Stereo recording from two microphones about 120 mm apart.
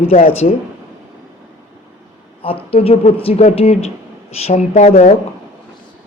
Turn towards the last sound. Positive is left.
turn(degrees=70)  # may be behind; listen again after turning